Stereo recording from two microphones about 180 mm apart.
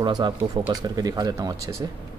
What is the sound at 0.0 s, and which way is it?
Speech, 25° right (ahead or behind).